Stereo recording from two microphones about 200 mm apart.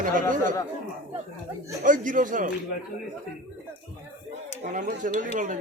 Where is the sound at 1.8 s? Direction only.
40° right (ahead or behind).